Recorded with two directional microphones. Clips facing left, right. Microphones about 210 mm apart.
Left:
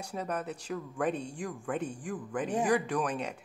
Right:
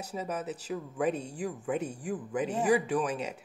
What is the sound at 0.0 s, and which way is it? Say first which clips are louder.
Speech: even; 5° right (ahead or behind).